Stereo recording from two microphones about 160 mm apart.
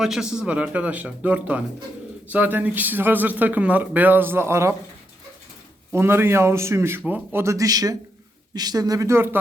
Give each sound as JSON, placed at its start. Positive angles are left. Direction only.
{"t": 0.0, "sound": "speech", "side_deg": -5}
{"t": 5.9, "sound": "speech", "side_deg": -15}